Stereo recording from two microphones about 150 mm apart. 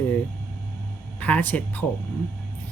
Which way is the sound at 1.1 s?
10° left (ahead or behind).